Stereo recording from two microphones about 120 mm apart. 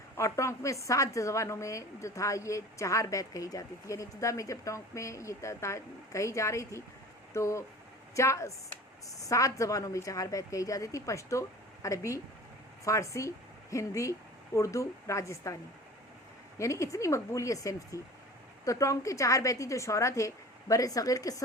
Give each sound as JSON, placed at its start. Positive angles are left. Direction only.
{"t": 0.2, "sound": "a woman's voice", "side_deg": 25}
{"t": 16.6, "sound": "a woman's voice", "side_deg": 25}